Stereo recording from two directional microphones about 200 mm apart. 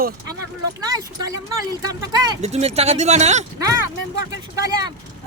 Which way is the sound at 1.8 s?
20° right (ahead or behind).